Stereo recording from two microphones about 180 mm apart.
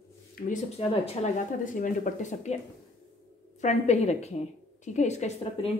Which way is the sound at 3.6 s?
40° left (ahead or behind).